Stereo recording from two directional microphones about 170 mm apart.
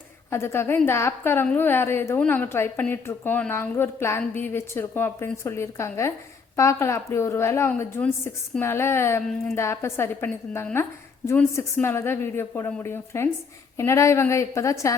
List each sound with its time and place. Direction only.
0.3 s a woman's voice: 15° left (ahead or behind)